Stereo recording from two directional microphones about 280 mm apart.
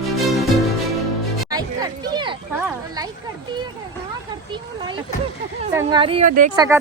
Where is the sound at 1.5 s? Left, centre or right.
Centre.